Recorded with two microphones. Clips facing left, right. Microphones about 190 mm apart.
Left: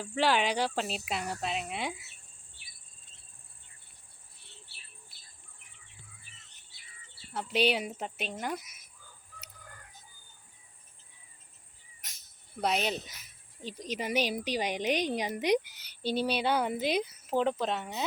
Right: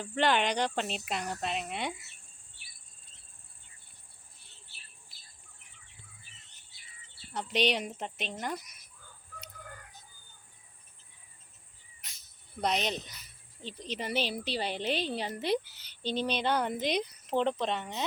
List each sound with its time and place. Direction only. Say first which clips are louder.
0.0 s speech: even; 5° left (ahead or behind)
7.3 s speech: left 1 dB; 5° left (ahead or behind)
9.6 s chicken: right 6 dB; 60° right (ahead or behind)
12.5 s a woman's voice: left 1 dB; 5° left (ahead or behind)